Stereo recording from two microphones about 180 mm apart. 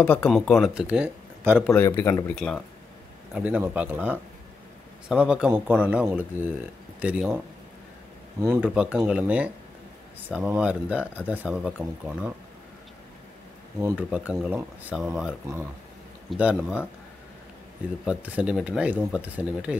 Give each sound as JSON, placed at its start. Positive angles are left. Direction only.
{"t": 0.0, "sound": "speech", "side_deg": 5}
{"t": 1.9, "sound": "speech", "side_deg": 15}
{"t": 2.3, "sound": "speech", "side_deg": 5}
{"t": 3.3, "sound": "speech", "side_deg": -5}
{"t": 8.7, "sound": "speech", "side_deg": -5}
{"t": 13.7, "sound": "speech", "side_deg": -10}
{"t": 18.0, "sound": "speech", "side_deg": -5}